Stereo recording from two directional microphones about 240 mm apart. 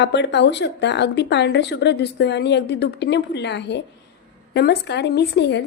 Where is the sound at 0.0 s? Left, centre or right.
Left.